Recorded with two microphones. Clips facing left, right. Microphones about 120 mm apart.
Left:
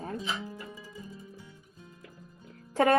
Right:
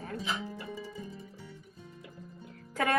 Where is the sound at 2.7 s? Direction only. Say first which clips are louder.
Left 6 dB; 30° left (ahead or behind).